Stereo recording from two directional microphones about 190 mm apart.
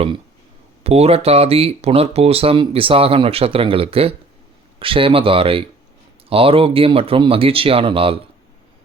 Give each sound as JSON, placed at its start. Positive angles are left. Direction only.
{"t": 0.9, "sound": "speech", "side_deg": -35}